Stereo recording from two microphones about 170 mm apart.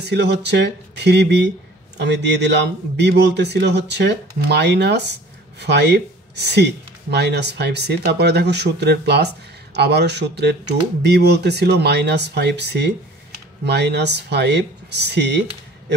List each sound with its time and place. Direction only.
0.0 s speech: 80° right
13.7 s speech: 80° right